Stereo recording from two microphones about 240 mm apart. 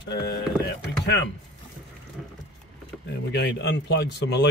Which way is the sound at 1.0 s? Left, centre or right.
Left.